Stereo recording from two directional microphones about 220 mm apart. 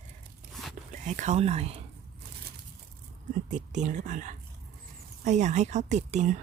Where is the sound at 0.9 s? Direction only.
35° right (ahead or behind).